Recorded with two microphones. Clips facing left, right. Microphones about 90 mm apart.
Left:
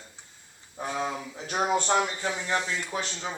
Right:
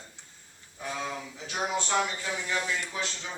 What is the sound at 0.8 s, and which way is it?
Speech, 35° left (ahead or behind).